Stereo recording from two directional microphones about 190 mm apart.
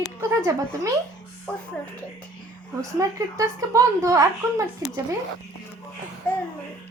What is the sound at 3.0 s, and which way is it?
A woman's voice, 15° right (ahead or behind).